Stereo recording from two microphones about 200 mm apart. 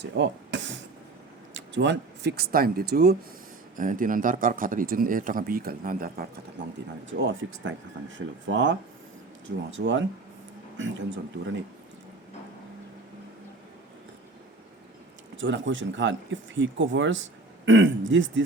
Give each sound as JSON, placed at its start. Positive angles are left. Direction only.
{"t": 0.0, "sound": "speech", "side_deg": -65}
{"t": 6.6, "sound": "speech", "side_deg": -65}
{"t": 15.4, "sound": "speech", "side_deg": -70}